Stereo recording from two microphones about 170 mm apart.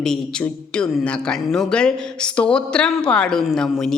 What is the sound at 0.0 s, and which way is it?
A man's voice, 5° left (ahead or behind).